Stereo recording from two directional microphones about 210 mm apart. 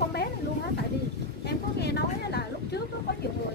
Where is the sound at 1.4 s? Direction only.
50° left (ahead or behind).